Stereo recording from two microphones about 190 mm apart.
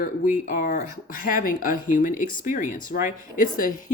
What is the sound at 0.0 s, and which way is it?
Speech, 45° left (ahead or behind).